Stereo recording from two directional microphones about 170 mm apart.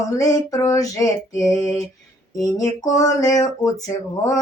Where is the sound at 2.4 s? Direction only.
20° left (ahead or behind).